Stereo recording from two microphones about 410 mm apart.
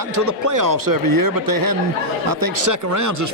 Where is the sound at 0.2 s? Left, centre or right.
Right.